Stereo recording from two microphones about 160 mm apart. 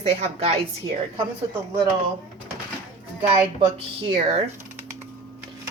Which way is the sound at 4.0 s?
35° right (ahead or behind).